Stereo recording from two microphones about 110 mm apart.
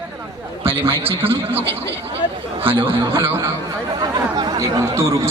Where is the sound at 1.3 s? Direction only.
60° right (ahead or behind).